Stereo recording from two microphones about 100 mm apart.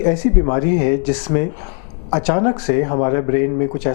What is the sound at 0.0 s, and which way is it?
Speech, 15° left (ahead or behind).